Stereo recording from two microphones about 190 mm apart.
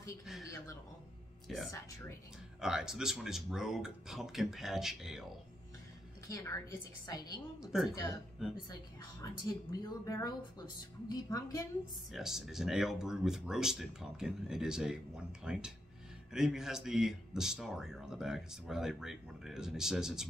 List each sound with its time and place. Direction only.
1.7 s speech: 15° left (ahead or behind)
2.6 s speech: 5° right (ahead or behind)
6.2 s a woman's voice: 15° left (ahead or behind)
7.6 s speech: centre (ahead or behind)
7.9 s speech: 15° left (ahead or behind)
9.2 s speech: 20° left (ahead or behind)
12.1 s speech: centre (ahead or behind)